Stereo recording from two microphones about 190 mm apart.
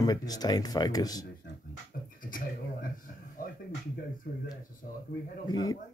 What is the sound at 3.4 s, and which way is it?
Music, 45° left (ahead or behind).